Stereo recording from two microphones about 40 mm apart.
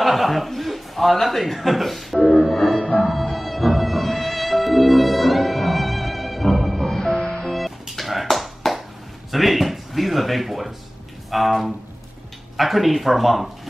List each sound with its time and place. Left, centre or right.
0.0 s speech: centre
2.1 s music: left
3.0 s music: centre
7.2 s music: left
8.0 s a sound: centre
12.5 s speech: centre